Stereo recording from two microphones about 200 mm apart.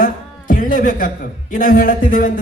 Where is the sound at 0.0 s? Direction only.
45° left (ahead or behind).